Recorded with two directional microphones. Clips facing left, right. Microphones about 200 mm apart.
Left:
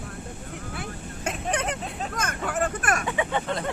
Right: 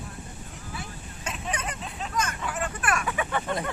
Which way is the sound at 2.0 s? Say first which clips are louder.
Left 1 dB; 50° left (ahead or behind).